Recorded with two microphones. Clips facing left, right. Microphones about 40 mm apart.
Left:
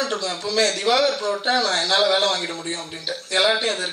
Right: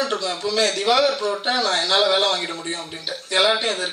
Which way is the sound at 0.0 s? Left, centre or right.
Centre.